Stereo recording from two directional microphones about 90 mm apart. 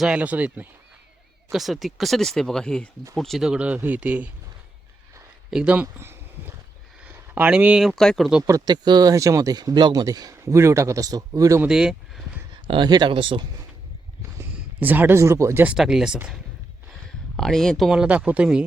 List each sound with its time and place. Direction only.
0.0 s speech: 15° right (ahead or behind)
1.5 s speech: centre (ahead or behind)
5.5 s speech: 10° right (ahead or behind)
5.7 s speech: 25° right (ahead or behind)
7.0 s a sound: 15° right (ahead or behind)
7.9 s speech: 5° left (ahead or behind)
8.4 s speech: 45° right (ahead or behind)
11.7 s speech: 5° right (ahead or behind)
12.6 s speech: 65° right (ahead or behind)
14.8 s speech: 20° right (ahead or behind)
15.6 s speech: 10° right (ahead or behind)
17.3 s speech: 5° left (ahead or behind)
18.0 s speech: 15° right (ahead or behind)